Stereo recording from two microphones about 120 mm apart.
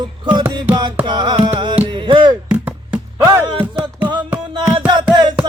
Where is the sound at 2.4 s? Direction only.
10° right (ahead or behind).